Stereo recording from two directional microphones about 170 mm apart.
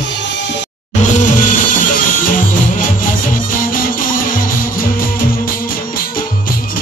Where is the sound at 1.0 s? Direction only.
45° left (ahead or behind).